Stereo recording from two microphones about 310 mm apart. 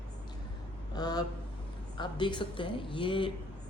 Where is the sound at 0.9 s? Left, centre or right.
Centre.